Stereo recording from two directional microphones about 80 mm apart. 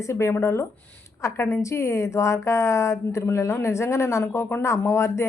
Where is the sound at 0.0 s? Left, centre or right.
Left.